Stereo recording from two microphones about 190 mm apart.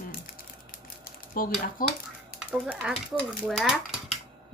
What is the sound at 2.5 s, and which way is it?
Speech, 5° right (ahead or behind).